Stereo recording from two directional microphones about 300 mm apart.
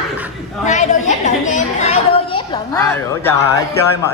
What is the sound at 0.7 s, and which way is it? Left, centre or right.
Chatter, left.